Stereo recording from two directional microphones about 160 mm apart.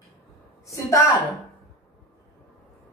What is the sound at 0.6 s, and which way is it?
Speech, 20° left (ahead or behind).